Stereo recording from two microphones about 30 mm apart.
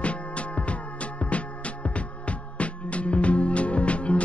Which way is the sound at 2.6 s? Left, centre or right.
Left.